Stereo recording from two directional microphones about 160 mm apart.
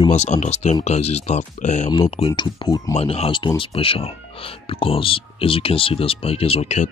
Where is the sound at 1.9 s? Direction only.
30° left (ahead or behind).